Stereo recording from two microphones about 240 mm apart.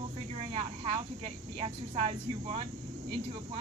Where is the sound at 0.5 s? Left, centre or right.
Right.